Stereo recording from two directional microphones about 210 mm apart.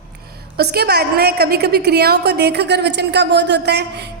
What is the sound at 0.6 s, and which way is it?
A woman's voice, 50° right (ahead or behind).